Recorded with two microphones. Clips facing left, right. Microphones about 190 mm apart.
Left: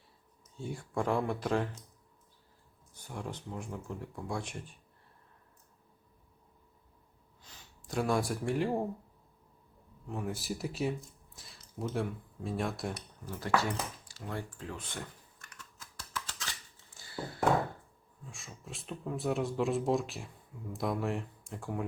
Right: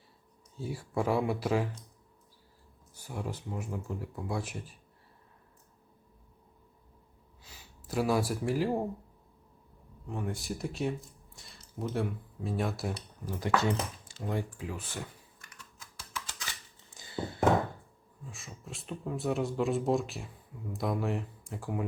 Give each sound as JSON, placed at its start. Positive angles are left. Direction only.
{"t": 0.5, "sound": "speech", "side_deg": -5}
{"t": 2.9, "sound": "speech", "side_deg": -5}
{"t": 7.4, "sound": "speech", "side_deg": -5}
{"t": 10.1, "sound": "speech", "side_deg": 0}
{"t": 13.2, "sound": "speech", "side_deg": -15}
{"t": 16.1, "sound": "a sound", "side_deg": -10}
{"t": 18.3, "sound": "speech", "side_deg": 0}